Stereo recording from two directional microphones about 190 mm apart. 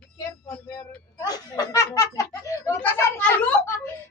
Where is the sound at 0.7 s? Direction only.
20° left (ahead or behind).